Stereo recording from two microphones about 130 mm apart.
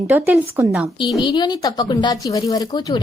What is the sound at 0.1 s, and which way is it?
Speech, 15° right (ahead or behind).